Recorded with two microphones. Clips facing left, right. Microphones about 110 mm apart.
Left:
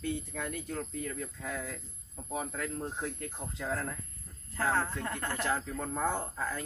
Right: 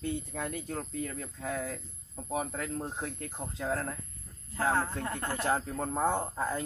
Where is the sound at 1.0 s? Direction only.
45° right (ahead or behind).